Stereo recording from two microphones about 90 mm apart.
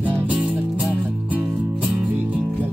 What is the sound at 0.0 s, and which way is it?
Music, 20° right (ahead or behind).